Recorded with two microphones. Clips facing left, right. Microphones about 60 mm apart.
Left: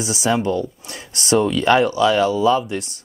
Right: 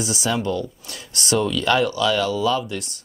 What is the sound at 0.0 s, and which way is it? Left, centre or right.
Speech, left.